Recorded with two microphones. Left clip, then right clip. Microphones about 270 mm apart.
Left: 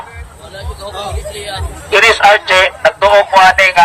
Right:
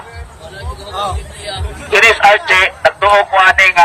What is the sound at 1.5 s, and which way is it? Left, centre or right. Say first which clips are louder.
Speech: left 1 dB; centre.